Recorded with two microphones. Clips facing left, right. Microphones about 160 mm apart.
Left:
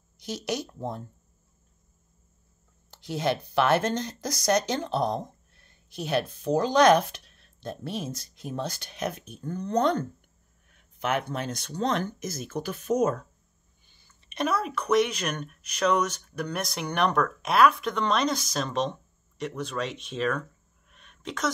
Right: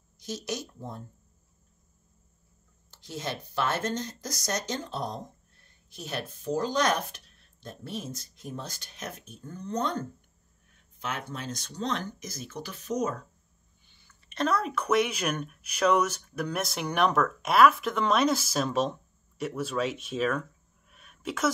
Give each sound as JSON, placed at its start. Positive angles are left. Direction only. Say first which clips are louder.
{"t": 0.2, "sound": "speech", "louder": "left 3 dB", "side_deg": 65}
{"t": 2.9, "sound": "speech", "louder": "left 8 dB", "side_deg": 65}
{"t": 11.0, "sound": "speech", "louder": "left 7 dB", "side_deg": 65}
{"t": 14.3, "sound": "speech", "louder": "even", "side_deg": 15}
{"t": 14.6, "sound": "speech", "louder": "left 2 dB", "side_deg": 0}
{"t": 20.9, "sound": "a sound", "louder": "right 2 dB", "side_deg": -5}